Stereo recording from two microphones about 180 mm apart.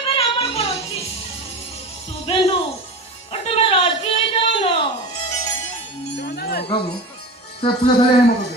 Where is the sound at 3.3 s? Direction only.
35° left (ahead or behind).